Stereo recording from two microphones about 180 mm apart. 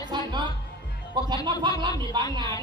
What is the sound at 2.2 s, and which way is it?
Speech, 25° right (ahead or behind).